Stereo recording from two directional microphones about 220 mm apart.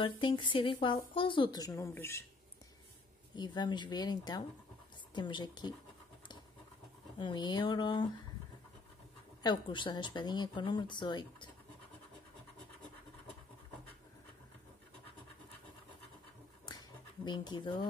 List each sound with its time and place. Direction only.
0.0 s speech: 20° left (ahead or behind)
3.3 s speech: 20° left (ahead or behind)
7.2 s speech: 20° left (ahead or behind)
9.4 s speech: 20° left (ahead or behind)
16.6 s a sound: 20° left (ahead or behind)